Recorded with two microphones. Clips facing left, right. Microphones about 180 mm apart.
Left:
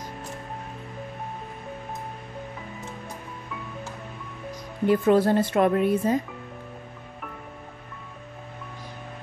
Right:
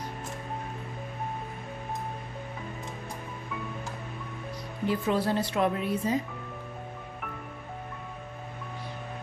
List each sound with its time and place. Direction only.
4.8 s speech: 55° left (ahead or behind)